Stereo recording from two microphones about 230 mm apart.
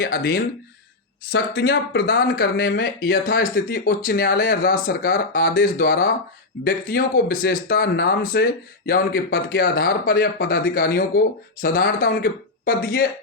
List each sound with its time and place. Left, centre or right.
0.0 s speech: left